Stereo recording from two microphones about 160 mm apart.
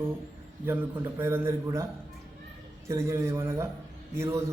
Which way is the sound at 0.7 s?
15° right (ahead or behind).